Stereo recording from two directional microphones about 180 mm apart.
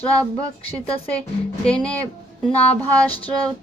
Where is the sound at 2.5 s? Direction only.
35° left (ahead or behind).